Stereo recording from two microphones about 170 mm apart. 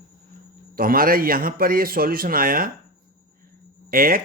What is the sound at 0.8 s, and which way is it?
Speech, 55° right (ahead or behind).